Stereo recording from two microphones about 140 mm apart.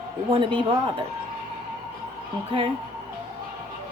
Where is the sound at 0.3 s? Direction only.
40° right (ahead or behind).